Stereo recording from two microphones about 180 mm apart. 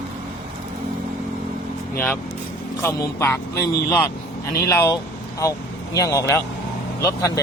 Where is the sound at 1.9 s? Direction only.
10° left (ahead or behind).